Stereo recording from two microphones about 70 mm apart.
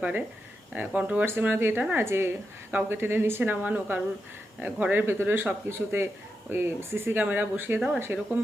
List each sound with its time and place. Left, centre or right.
0.7 s speech: right